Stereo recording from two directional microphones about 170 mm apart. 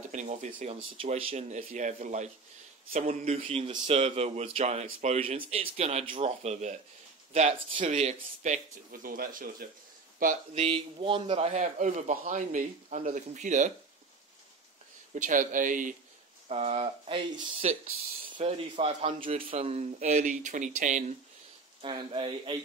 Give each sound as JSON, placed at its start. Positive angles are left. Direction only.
{"t": 0.1, "sound": "a man's voice", "side_deg": -45}
{"t": 10.5, "sound": "a man's voice", "side_deg": -35}
{"t": 15.1, "sound": "a man's voice", "side_deg": -50}
{"t": 21.8, "sound": "speech", "side_deg": -30}